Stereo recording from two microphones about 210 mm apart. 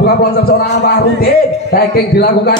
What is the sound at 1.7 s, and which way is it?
Speech, 50° left (ahead or behind).